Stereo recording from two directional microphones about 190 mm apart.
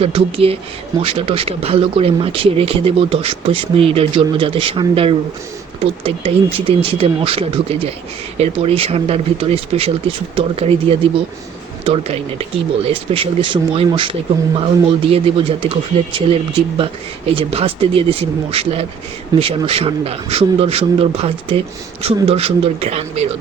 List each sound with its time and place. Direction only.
0.0 s a man's voice: 30° right (ahead or behind)